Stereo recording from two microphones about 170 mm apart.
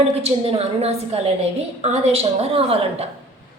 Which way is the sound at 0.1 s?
35° right (ahead or behind).